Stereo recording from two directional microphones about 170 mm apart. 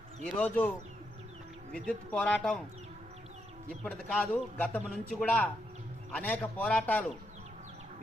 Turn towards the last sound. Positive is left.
turn(degrees=5)  # may be behind; listen again after turning